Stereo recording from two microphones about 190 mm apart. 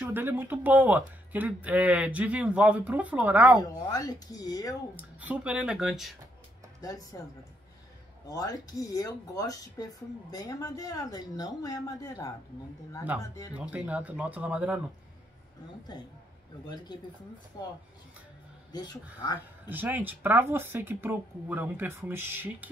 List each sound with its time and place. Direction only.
0.0 s speech: 10° right (ahead or behind)
3.8 s speech: 20° left (ahead or behind)
4.9 s speech: 10° right (ahead or behind)
6.8 s speech: 20° left (ahead or behind)
8.3 s speech: 20° left (ahead or behind)
13.1 s speech: 10° right (ahead or behind)
16.6 s speech: 20° left (ahead or behind)
18.7 s speech: 20° left (ahead or behind)
19.7 s speech: 10° right (ahead or behind)